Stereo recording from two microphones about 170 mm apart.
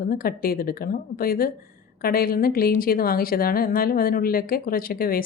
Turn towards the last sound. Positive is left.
turn(degrees=60)  # may be behind; listen again after turning